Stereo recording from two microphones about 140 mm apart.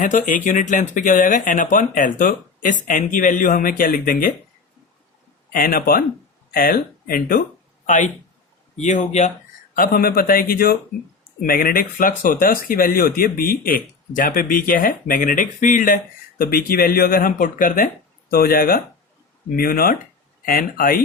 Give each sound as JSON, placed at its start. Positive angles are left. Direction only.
{"t": 0.0, "sound": "speech", "side_deg": 70}
{"t": 5.5, "sound": "speech", "side_deg": 90}
{"t": 7.9, "sound": "speech", "side_deg": 65}
{"t": 9.7, "sound": "speech", "side_deg": 90}
{"t": 16.4, "sound": "speech", "side_deg": 90}